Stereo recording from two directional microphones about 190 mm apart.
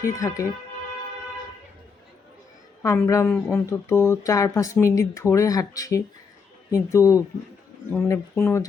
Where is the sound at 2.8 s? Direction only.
15° left (ahead or behind).